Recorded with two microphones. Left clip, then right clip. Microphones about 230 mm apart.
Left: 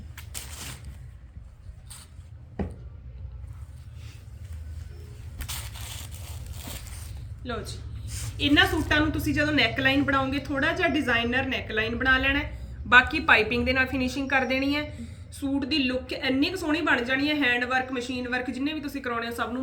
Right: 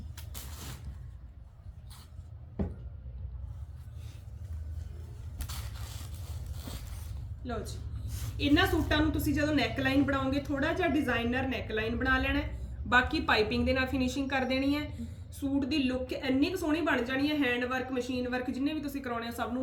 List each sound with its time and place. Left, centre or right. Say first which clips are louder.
5.5 s scrape: left 8 dB; left
7.4 s a woman's voice: left 4 dB; centre